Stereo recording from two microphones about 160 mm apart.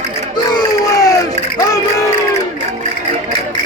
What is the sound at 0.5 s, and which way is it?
Crowd, 25° left (ahead or behind).